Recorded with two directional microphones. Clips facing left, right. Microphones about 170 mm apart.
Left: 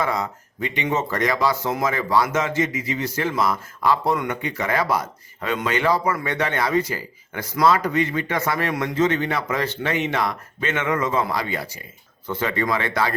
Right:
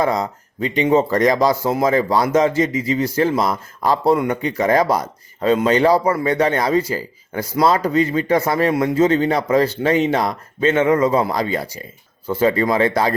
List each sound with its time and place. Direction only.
0.0 s speech: 35° right (ahead or behind)